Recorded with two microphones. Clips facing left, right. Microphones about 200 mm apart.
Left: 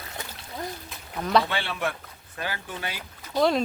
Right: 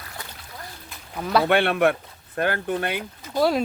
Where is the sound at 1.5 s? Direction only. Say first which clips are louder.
Right 11 dB; 60° right (ahead or behind).